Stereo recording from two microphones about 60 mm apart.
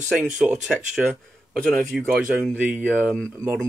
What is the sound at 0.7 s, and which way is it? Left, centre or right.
Speech, centre.